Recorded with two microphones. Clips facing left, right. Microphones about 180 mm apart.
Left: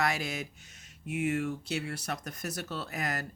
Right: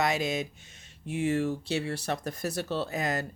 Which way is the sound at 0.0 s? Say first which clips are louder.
Right 4 dB; 20° right (ahead or behind).